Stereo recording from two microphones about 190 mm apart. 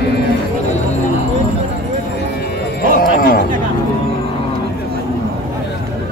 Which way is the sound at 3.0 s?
50° left (ahead or behind).